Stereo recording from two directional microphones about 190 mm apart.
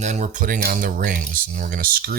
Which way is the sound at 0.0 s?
40° right (ahead or behind).